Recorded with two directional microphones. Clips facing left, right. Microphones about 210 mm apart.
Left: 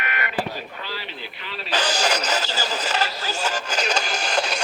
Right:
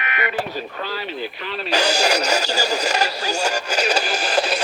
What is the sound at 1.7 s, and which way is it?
Speech, 10° right (ahead or behind).